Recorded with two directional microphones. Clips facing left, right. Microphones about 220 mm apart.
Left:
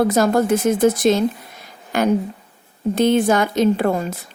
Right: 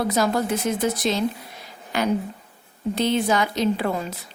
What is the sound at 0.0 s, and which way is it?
A woman's voice, 50° left (ahead or behind).